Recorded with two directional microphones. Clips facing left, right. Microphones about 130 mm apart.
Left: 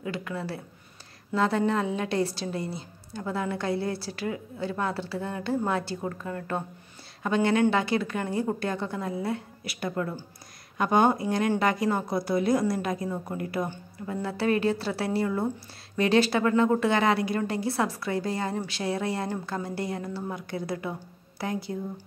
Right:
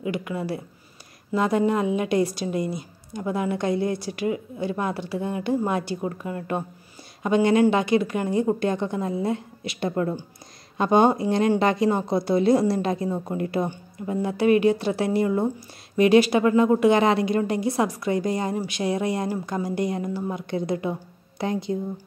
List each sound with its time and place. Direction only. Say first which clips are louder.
0.0 s a woman's voice: right 5 dB; 15° right (ahead or behind)